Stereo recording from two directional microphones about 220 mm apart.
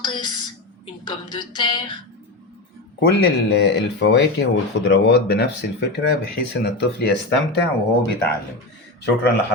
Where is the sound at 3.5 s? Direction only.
50° left (ahead or behind).